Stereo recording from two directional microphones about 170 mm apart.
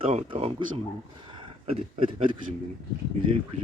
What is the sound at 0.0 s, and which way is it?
Speech, 35° right (ahead or behind).